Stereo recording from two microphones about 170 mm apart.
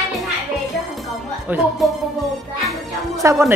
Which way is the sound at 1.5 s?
10° right (ahead or behind).